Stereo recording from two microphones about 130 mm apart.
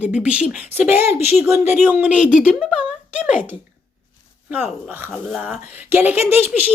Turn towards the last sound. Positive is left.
turn(degrees=-15)  # may be behind; listen again after turning